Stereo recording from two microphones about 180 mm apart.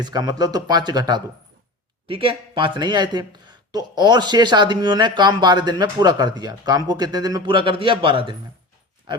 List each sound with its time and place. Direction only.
0.0 s speech: 20° right (ahead or behind)